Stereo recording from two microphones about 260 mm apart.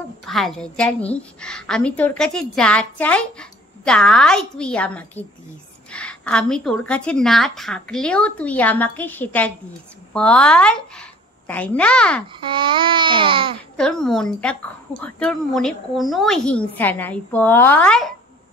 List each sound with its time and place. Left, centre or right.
0.2 s a woman's voice: centre
12.4 s babbling: centre
13.7 s a woman's voice: centre